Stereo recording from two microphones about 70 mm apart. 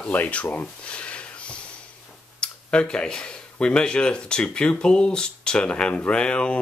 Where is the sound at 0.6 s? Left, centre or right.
Centre.